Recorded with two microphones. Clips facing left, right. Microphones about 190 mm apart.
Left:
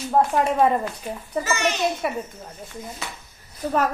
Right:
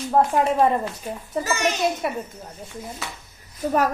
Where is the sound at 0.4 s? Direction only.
Centre (ahead or behind).